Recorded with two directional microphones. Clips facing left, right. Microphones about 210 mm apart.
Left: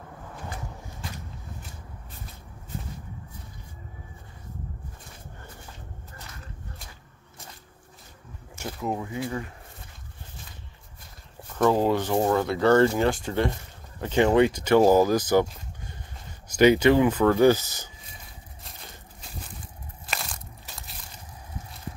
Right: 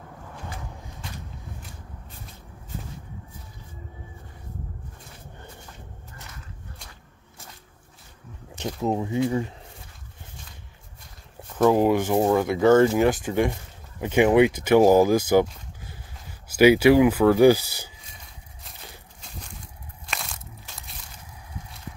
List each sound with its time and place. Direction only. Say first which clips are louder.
8.5 s speech: right 5 dB; 20° right (ahead or behind)
11.7 s speech: right 3 dB; 15° right (ahead or behind)
15.4 s a sound: right 1 dB; centre (ahead or behind)
16.4 s speech: right 2 dB; 5° right (ahead or behind)
20.1 s crunch: even; centre (ahead or behind)